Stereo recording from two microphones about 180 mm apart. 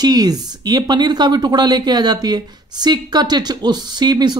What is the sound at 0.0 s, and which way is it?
Speech, 20° right (ahead or behind).